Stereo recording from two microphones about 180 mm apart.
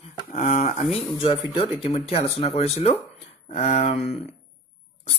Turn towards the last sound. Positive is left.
turn(degrees=35)  # may be behind; listen again after turning